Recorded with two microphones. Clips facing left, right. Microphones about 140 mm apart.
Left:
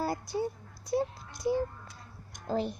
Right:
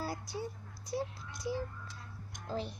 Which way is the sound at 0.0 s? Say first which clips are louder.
Left 7 dB; 55° left (ahead or behind).